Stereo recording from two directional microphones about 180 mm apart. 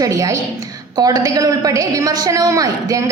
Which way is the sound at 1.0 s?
20° right (ahead or behind).